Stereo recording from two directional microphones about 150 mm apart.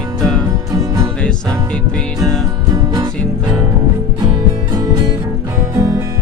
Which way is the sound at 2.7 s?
30° right (ahead or behind).